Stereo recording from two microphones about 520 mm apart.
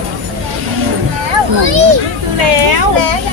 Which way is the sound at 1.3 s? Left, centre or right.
Right.